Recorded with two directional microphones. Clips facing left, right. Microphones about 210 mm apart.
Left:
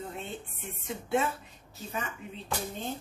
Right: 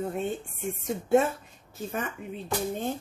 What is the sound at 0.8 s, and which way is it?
Speech, 45° right (ahead or behind).